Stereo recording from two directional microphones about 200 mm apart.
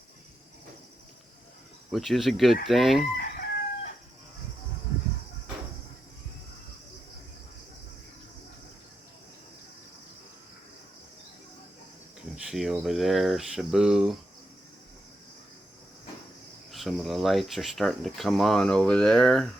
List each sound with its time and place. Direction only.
1.9 s speech: centre (ahead or behind)
3.2 s crowing: 50° left (ahead or behind)
12.5 s cricket: centre (ahead or behind)
16.7 s speech: centre (ahead or behind)